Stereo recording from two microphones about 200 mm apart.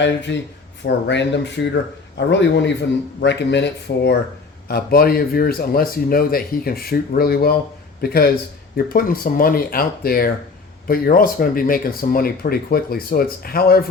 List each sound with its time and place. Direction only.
0.3 s speech: 65° left (ahead or behind); by 13.8 s 50° left (ahead or behind)